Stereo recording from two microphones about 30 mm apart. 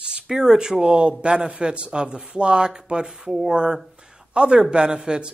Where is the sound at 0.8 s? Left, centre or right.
Right.